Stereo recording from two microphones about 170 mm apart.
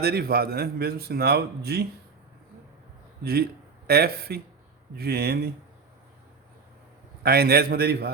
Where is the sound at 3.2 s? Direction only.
65° right (ahead or behind).